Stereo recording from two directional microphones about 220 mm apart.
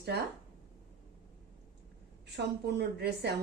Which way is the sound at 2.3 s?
50° right (ahead or behind).